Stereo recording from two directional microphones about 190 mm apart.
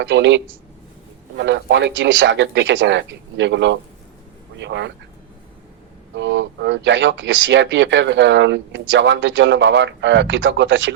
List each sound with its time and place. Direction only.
0.0 s speech: 70° right (ahead or behind)
6.1 s speech: 70° right (ahead or behind)